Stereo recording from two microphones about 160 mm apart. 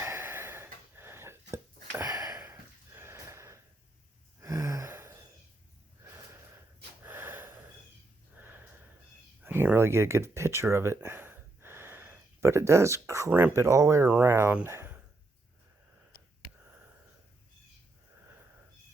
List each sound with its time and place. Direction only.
0.0 s a sound: 15° right (ahead or behind)
4.4 s gasp: 20° right (ahead or behind)
7.0 s gasp: 15° right (ahead or behind)
8.4 s snort: 10° right (ahead or behind)
9.4 s speech: 15° right (ahead or behind)